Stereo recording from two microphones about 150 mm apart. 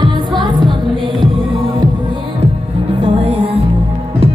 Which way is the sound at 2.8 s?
40° right (ahead or behind).